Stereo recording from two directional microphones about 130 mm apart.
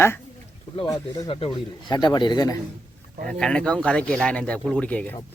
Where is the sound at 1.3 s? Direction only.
40° left (ahead or behind).